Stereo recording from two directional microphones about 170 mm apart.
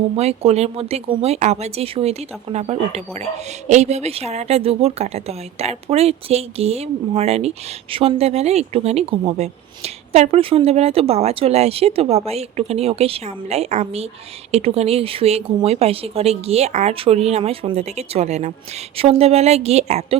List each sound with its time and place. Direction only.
0.2 s speech: 40° right (ahead or behind)